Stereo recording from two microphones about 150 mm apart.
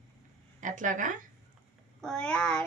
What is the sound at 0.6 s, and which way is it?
Speech, 60° right (ahead or behind).